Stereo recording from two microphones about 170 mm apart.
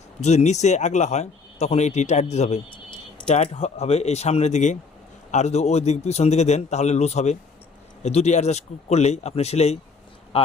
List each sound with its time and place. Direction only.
0.2 s speech: 40° left (ahead or behind)